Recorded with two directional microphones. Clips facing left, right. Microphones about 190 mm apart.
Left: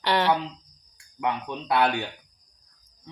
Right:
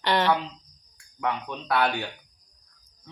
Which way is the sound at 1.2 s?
20° left (ahead or behind).